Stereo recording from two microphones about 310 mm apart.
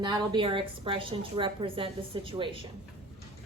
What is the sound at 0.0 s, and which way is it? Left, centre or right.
A woman's voice, centre.